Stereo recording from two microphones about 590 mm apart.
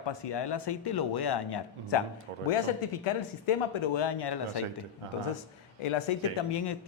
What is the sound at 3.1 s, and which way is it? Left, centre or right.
Speech, left.